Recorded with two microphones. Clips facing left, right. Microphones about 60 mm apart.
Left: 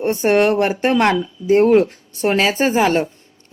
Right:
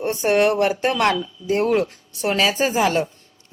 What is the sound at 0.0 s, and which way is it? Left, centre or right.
A woman's voice, left.